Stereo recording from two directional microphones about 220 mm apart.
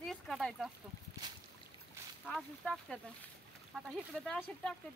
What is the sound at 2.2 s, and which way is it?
Speech, 5° left (ahead or behind).